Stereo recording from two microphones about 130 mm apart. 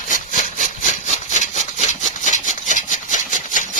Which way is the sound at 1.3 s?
65° left (ahead or behind).